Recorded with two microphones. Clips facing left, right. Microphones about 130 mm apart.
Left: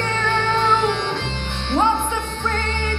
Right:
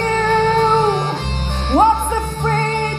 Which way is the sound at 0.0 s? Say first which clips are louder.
Right 7 dB; 40° right (ahead or behind).